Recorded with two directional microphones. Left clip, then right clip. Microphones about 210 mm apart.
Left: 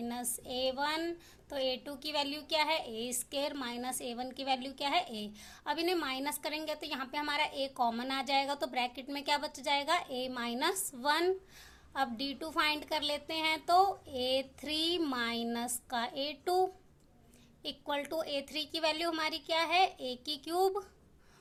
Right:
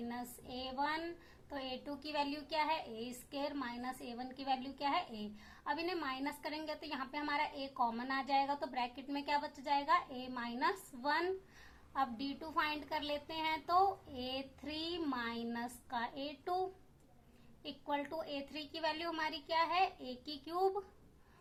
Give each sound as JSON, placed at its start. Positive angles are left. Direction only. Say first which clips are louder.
{"t": 0.1, "sound": "a woman's voice", "louder": "left 6 dB", "side_deg": 45}